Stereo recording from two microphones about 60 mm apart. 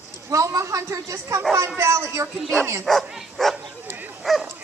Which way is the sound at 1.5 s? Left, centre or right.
Right.